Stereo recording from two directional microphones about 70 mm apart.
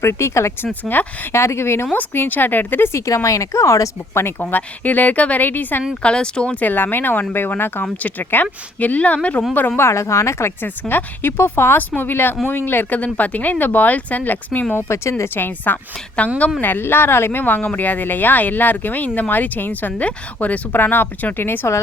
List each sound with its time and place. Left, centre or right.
0.0 s speech: left
0.6 s speech: left
1.3 s speech: left
3.2 s speech: left
4.4 s speech: left
6.0 s speech: centre
9.8 s speech: left